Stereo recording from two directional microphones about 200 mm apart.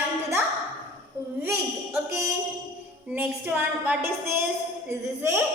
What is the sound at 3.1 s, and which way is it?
Speech, 5° right (ahead or behind).